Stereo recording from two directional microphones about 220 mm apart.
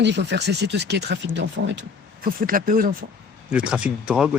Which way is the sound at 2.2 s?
40° right (ahead or behind).